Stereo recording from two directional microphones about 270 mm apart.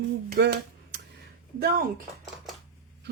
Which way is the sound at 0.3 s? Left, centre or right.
Right.